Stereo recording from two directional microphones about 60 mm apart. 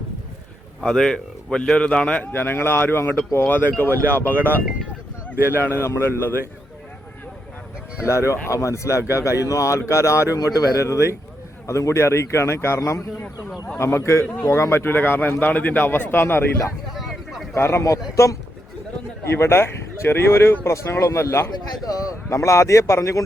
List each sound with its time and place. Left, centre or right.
0.8 s speech: centre
2.3 s speech: left
4.4 s speech: right
5.5 s speech: left
8.0 s speech: left
10.3 s a man's voice: left
10.8 s speech: left
16.9 s vehicle: centre
17.5 s speech: left
19.2 s speech: left
21.7 s speech: left